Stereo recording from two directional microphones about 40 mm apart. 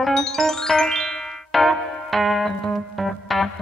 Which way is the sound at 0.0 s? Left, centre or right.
Centre.